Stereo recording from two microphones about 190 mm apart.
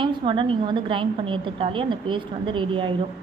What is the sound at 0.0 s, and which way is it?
A woman's voice, 25° right (ahead or behind).